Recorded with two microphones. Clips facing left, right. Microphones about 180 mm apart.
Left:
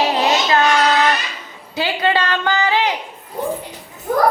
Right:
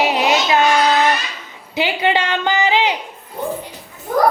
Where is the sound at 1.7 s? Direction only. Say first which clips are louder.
Right 1 dB; 20° right (ahead or behind).